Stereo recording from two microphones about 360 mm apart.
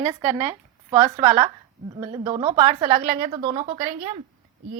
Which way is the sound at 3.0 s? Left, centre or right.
Right.